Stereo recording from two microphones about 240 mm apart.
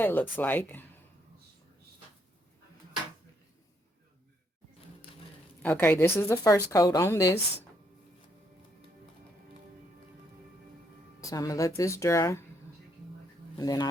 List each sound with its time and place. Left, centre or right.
0.0 s speech: centre
5.6 s speech: centre
11.2 s speech: centre
13.6 s speech: centre